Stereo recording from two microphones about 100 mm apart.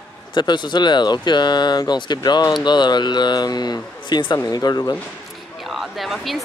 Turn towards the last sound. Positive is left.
turn(degrees=0)  # may be behind; listen again after turning